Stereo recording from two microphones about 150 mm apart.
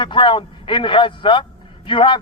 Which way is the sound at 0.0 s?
35° left (ahead or behind).